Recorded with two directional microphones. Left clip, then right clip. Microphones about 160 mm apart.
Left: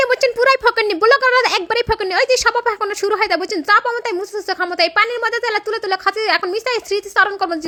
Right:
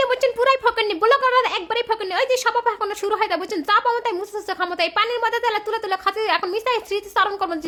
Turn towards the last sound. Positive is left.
turn(degrees=20)  # may be behind; listen again after turning